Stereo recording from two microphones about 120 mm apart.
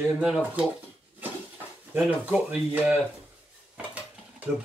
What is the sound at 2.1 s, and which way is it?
Speech, 15° right (ahead or behind).